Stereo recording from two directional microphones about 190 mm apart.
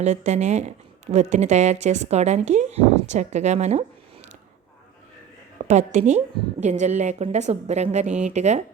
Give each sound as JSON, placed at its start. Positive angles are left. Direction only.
{"t": 0.3, "sound": "a woman's voice", "side_deg": -40}
{"t": 5.6, "sound": "a woman's voice", "side_deg": -40}